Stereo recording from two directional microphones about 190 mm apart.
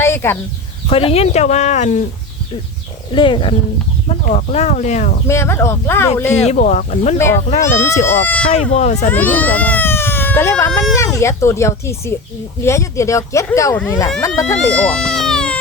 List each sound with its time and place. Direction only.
0.0 s chicken: 15° left (ahead or behind)
0.9 s speech: 30° left (ahead or behind)
3.1 s speech: 25° left (ahead or behind)
5.3 s speech: 15° left (ahead or behind)
6.4 s speech: 35° left (ahead or behind)
7.6 s speech: 15° left (ahead or behind)
8.4 s speech: 35° left (ahead or behind)
9.0 s speech: 10° left (ahead or behind)
11.0 s speech: 15° left (ahead or behind)
14.8 s baby cry: 5° left (ahead or behind)